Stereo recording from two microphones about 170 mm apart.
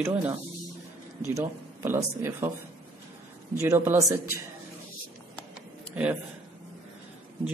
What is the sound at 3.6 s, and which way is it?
Speech, 15° right (ahead or behind).